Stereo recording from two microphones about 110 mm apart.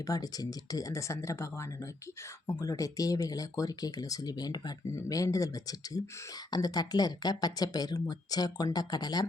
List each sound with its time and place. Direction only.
0.0 s speech: 35° left (ahead or behind)